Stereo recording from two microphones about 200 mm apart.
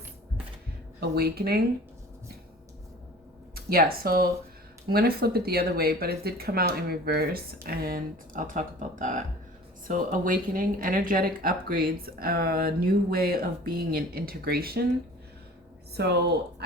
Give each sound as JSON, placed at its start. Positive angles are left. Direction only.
{"t": 0.9, "sound": "speech", "side_deg": -50}
{"t": 3.5, "sound": "speech", "side_deg": -50}
{"t": 16.0, "sound": "speech", "side_deg": -55}